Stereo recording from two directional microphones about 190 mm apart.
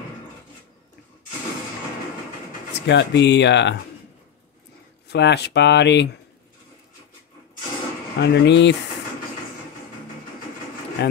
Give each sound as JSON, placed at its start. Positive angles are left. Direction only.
{"t": 2.7, "sound": "speech", "side_deg": 65}
{"t": 5.0, "sound": "speech", "side_deg": 60}
{"t": 8.2, "sound": "speech", "side_deg": 65}
{"t": 11.0, "sound": "speech", "side_deg": 60}